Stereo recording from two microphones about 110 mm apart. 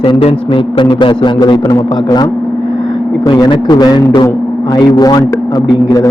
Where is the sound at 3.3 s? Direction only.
45° left (ahead or behind).